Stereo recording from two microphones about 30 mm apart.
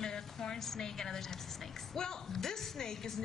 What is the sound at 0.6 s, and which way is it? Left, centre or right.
A woman's voice, centre.